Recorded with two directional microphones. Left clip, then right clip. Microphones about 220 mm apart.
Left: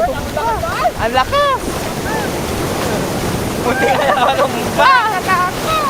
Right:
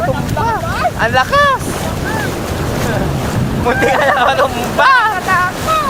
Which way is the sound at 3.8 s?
35° right (ahead or behind).